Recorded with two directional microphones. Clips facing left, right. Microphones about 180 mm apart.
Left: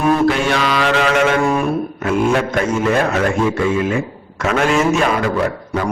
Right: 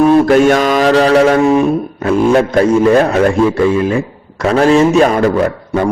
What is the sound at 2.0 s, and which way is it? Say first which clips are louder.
A man's voice: right 6 dB; 35° right (ahead or behind).